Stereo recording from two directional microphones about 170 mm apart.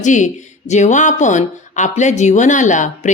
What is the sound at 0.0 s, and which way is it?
Speech, 45° left (ahead or behind).